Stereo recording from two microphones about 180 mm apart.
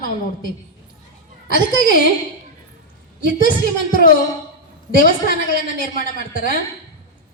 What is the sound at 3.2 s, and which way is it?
A woman's voice, 50° left (ahead or behind).